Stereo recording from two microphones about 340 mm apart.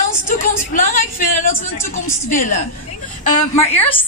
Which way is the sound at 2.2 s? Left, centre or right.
Left.